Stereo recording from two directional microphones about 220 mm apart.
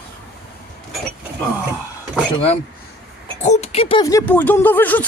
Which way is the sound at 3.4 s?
30° left (ahead or behind).